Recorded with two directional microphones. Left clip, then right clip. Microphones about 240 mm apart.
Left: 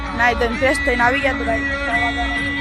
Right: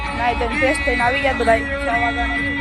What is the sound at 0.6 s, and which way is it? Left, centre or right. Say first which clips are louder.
Speech: left 2 dB; centre.